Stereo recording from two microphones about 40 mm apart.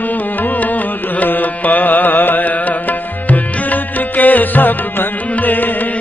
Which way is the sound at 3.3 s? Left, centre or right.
Left.